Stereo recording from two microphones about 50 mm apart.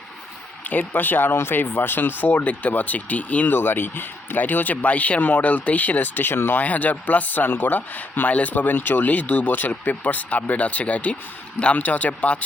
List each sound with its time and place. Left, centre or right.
0.6 s speech: left
6.6 s speech: left